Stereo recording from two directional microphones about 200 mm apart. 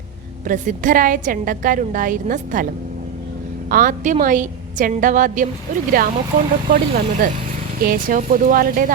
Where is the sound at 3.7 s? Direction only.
45° right (ahead or behind).